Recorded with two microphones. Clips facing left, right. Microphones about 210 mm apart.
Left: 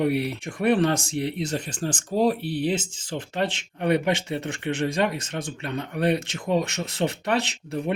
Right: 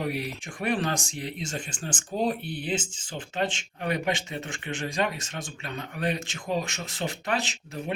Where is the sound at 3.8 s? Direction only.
60° left (ahead or behind).